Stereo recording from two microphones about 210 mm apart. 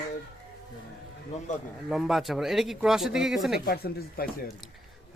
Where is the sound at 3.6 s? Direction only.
45° left (ahead or behind).